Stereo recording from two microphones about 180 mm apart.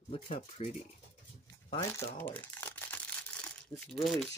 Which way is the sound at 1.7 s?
15° left (ahead or behind).